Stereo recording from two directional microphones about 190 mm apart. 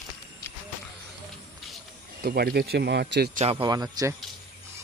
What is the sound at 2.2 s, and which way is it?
Speech, 55° right (ahead or behind).